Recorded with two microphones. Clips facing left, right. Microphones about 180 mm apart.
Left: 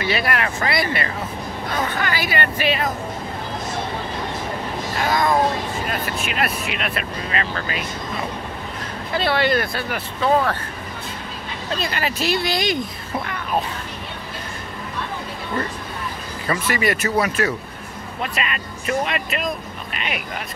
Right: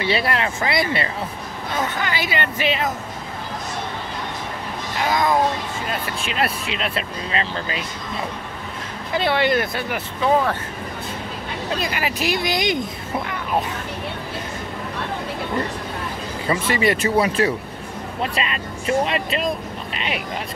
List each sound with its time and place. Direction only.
0.0 s speech: 25° right (ahead or behind)
4.9 s speech: 20° right (ahead or behind)
9.1 s speech: 20° right (ahead or behind)
11.7 s speech: 15° right (ahead or behind)
16.4 s speech: 25° right (ahead or behind)